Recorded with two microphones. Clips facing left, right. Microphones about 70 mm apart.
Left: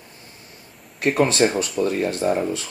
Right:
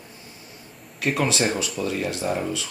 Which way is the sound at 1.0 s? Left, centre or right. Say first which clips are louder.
Left 5 dB; left.